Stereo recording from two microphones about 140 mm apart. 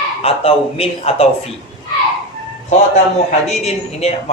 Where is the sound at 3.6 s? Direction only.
50° left (ahead or behind).